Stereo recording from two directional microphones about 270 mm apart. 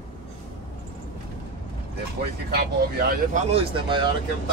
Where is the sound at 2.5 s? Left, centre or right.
Right.